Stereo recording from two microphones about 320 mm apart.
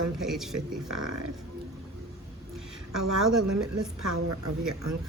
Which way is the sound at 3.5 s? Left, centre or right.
Right.